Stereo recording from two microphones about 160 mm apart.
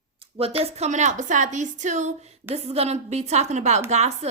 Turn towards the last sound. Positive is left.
turn(degrees=-45)  # may be behind; listen again after turning